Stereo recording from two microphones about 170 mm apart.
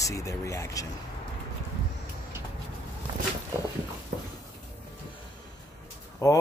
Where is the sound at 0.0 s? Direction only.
20° left (ahead or behind).